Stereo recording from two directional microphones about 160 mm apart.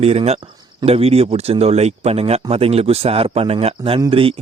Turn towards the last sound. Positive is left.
turn(degrees=-35)  # may be behind; listen again after turning